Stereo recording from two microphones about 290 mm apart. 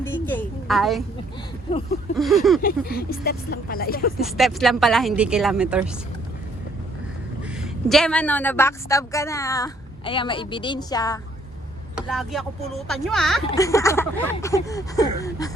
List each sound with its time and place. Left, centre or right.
0.0 s a sound: centre
2.1 s speech: centre
2.6 s speech: left
4.2 s speech: centre
7.6 s a woman's voice: centre
11.9 s a woman's voice: centre